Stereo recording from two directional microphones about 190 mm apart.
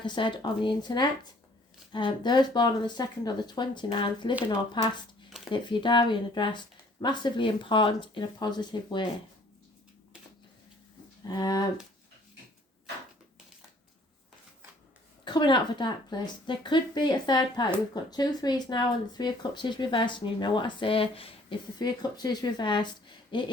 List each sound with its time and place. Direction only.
0.0 s speech: 25° left (ahead or behind)
11.3 s speech: 20° left (ahead or behind)
15.2 s speech: 25° left (ahead or behind)